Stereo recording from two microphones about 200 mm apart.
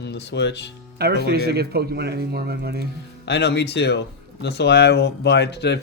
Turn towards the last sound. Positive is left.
turn(degrees=60)  # may be behind; listen again after turning